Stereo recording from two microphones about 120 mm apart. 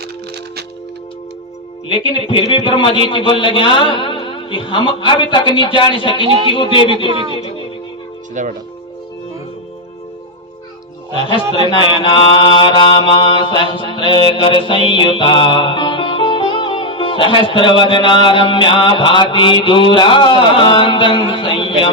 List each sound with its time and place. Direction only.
1.9 s mantra: 45° left (ahead or behind)
8.4 s speech: 90° right
11.1 s speech: 45° left (ahead or behind)
11.5 s mantra: 45° left (ahead or behind)